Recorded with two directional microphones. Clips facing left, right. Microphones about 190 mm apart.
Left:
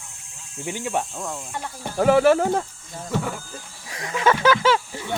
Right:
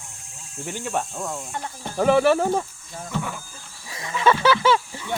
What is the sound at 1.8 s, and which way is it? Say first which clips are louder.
Speech: left 1 dB; 10° left (ahead or behind).